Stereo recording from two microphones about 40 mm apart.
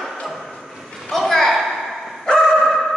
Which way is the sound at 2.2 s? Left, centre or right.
Centre.